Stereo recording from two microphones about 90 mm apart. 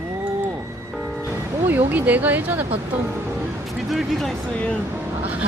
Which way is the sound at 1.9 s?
20° right (ahead or behind).